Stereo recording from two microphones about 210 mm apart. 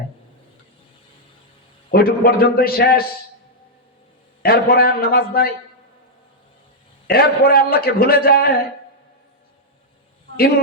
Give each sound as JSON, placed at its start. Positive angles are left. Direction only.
{"t": 1.9, "sound": "a man's voice", "side_deg": 45}
{"t": 4.4, "sound": "a man's voice", "side_deg": 45}
{"t": 7.1, "sound": "a man's voice", "side_deg": 45}